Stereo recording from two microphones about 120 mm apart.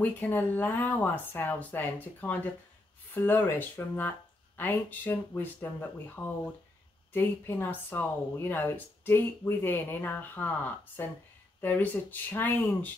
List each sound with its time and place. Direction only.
0.0 s speech: 15° left (ahead or behind)